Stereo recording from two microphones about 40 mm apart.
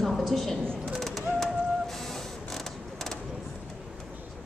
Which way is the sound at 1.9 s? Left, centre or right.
Centre.